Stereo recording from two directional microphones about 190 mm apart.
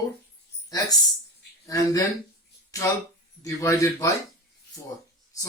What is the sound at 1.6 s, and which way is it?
Speech, 15° left (ahead or behind).